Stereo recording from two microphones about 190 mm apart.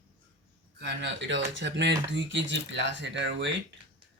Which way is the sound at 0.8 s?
70° right (ahead or behind).